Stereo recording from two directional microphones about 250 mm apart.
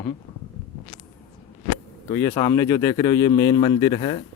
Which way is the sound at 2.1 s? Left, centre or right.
Centre.